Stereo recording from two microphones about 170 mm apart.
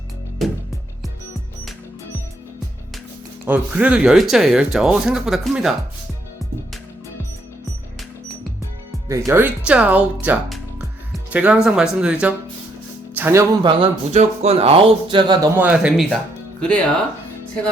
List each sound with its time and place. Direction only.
3.4 s speech: 10° right (ahead or behind)
9.0 s speech: 20° right (ahead or behind)
11.1 s speech: 10° right (ahead or behind)
13.1 s music: 10° right (ahead or behind)
13.6 s speech: 30° right (ahead or behind)
15.5 s speech: 10° right (ahead or behind)
16.6 s speech: 5° left (ahead or behind)